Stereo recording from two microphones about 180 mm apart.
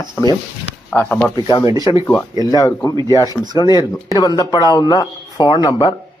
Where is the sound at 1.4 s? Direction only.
25° left (ahead or behind).